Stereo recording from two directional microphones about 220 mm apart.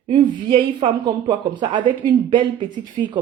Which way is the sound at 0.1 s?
25° right (ahead or behind).